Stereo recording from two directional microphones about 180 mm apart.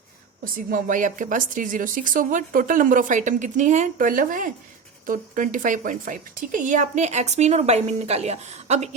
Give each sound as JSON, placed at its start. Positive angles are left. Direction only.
{"t": 0.4, "sound": "a woman's voice", "side_deg": -50}